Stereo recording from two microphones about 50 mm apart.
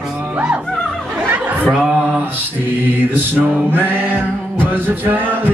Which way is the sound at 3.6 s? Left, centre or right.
Right.